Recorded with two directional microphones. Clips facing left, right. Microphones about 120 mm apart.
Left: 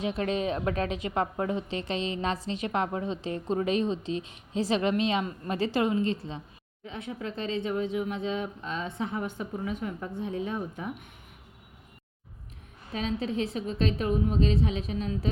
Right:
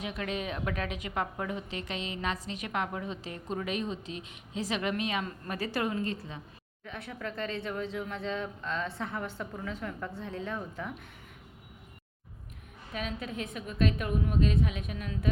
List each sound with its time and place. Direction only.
0.0 s a woman's voice: 30° left (ahead or behind)
12.9 s a woman's voice: 30° left (ahead or behind)